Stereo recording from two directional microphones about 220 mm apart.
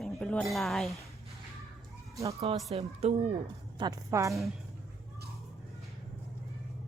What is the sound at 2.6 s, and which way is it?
Speech, 30° right (ahead or behind).